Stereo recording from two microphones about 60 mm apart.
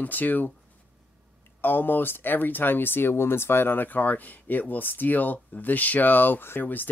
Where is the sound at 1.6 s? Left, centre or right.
Left.